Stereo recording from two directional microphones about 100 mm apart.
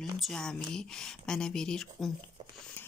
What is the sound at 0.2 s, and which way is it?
A woman's voice, 5° left (ahead or behind).